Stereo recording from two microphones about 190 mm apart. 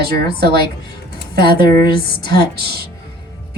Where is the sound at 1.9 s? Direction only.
55° right (ahead or behind).